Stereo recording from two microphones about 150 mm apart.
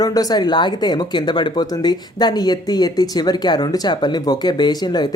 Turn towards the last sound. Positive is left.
turn(degrees=30)  # may be behind; listen again after turning